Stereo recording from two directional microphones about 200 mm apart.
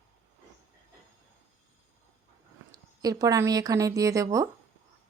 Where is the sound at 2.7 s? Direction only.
20° right (ahead or behind).